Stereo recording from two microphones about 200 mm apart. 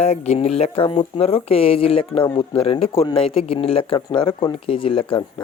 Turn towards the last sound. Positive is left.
turn(degrees=25)  # may be behind; listen again after turning